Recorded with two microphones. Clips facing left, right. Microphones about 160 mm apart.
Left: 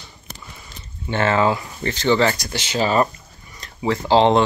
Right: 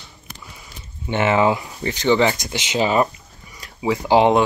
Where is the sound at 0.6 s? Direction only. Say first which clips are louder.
Even; 10° right (ahead or behind).